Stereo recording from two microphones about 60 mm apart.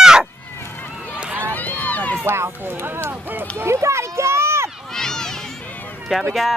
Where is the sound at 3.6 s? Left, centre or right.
Right.